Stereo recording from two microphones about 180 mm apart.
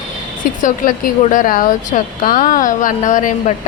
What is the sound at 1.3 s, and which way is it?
A woman's voice, 50° left (ahead or behind).